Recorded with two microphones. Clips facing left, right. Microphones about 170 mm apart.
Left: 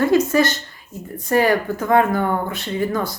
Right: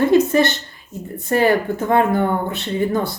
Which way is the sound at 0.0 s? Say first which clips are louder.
Right 2 dB; 25° right (ahead or behind).